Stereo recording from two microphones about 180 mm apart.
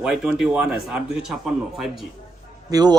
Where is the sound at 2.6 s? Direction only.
20° right (ahead or behind).